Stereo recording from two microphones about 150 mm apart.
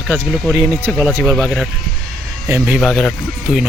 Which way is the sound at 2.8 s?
Centre (ahead or behind).